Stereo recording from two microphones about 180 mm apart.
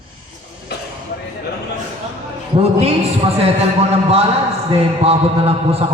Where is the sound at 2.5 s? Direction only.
35° right (ahead or behind).